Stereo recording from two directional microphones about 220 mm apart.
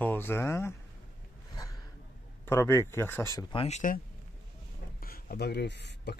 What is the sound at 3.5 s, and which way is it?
Speech, 30° left (ahead or behind).